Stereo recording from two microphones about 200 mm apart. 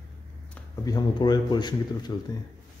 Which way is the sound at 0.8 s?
20° left (ahead or behind).